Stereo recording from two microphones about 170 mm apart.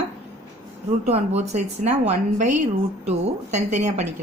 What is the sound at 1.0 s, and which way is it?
A woman's voice, 40° right (ahead or behind).